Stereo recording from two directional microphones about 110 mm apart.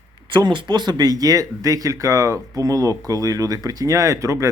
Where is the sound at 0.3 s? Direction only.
45° right (ahead or behind).